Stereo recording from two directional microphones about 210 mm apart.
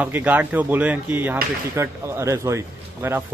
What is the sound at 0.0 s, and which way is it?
Speech, 10° right (ahead or behind).